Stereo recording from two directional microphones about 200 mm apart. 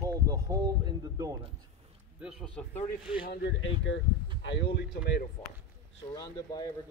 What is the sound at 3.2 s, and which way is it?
Speech, 55° left (ahead or behind).